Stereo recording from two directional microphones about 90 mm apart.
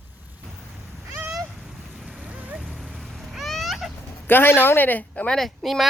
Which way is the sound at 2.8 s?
5° right (ahead or behind).